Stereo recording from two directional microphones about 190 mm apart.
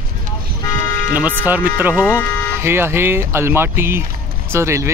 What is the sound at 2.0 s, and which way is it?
Speech, 15° left (ahead or behind).